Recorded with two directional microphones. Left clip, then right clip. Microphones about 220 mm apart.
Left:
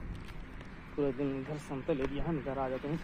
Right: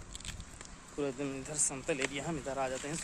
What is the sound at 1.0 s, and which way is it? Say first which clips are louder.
Speech: left 3 dB; 20° right (ahead or behind).